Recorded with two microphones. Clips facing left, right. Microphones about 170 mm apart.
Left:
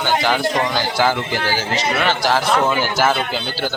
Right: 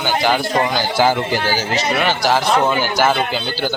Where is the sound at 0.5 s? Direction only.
25° right (ahead or behind).